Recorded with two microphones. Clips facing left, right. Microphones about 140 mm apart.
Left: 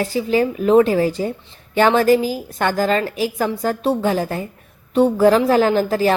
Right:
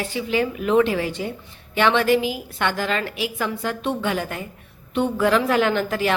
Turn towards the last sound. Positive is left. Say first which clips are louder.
# left 5 dB
turn(degrees=35)  # may be behind; listen again after turning